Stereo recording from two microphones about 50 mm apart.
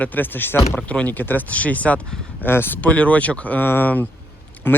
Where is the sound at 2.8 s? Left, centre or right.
Left.